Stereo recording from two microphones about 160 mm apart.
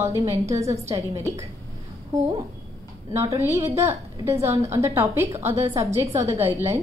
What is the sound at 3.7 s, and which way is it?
A woman's voice, 15° right (ahead or behind).